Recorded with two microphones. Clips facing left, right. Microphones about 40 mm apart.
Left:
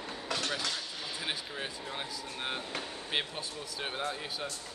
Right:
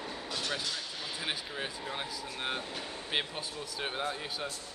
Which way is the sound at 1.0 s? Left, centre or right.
Centre.